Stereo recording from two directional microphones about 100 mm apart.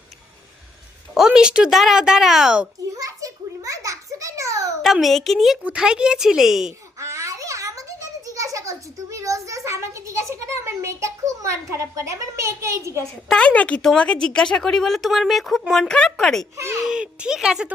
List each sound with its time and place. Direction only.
1.1 s speech: 5° right (ahead or behind)
3.0 s a child's voice: 35° right (ahead or behind)
4.8 s speech: centre (ahead or behind)
7.0 s a sound: 30° right (ahead or behind)
13.2 s speech: 10° left (ahead or behind)
16.8 s speech: 10° right (ahead or behind)